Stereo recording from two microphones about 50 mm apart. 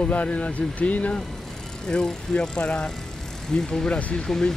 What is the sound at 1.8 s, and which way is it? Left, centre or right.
Speech, centre.